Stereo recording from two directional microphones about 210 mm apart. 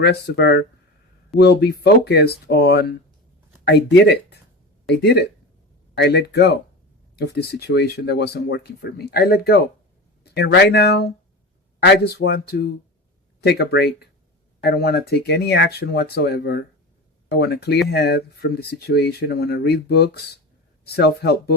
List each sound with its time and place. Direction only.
0.0 s speech: 50° left (ahead or behind)